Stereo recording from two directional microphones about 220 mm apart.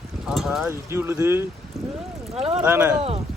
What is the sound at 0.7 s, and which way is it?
Speech, 10° right (ahead or behind).